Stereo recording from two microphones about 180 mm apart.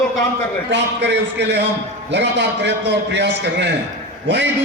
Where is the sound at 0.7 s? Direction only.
75° right (ahead or behind).